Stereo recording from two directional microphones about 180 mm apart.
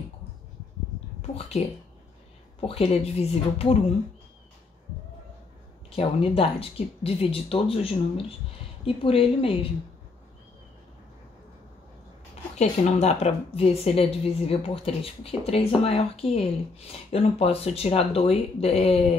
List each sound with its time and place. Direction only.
1.2 s speech: 35° left (ahead or behind)
2.6 s a woman's voice: 35° left (ahead or behind)
5.9 s a woman's voice: 30° left (ahead or behind)
12.5 s a woman's voice: 40° left (ahead or behind)